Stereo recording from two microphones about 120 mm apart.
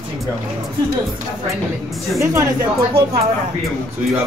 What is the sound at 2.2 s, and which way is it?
Speech, 20° right (ahead or behind).